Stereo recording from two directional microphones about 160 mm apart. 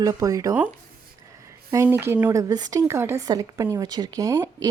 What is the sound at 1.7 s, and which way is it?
Speech, 15° right (ahead or behind).